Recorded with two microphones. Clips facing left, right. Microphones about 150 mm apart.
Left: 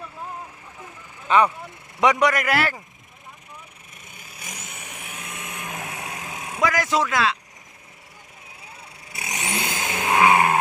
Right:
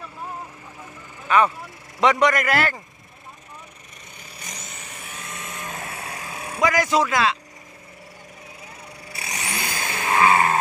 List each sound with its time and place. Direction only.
1.3 s speech: 25° left (ahead or behind)
2.0 s a man's voice: 10° left (ahead or behind)
4.2 s vehicle: 5° left (ahead or behind); by 6.6 s 20° left (ahead or behind)
6.6 s speech: centre (ahead or behind)
9.1 s vehicle: 20° left (ahead or behind)